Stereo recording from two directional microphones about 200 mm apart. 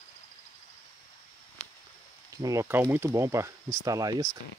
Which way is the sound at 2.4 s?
15° right (ahead or behind).